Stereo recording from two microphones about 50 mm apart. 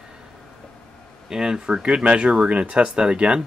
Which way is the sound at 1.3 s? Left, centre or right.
Centre.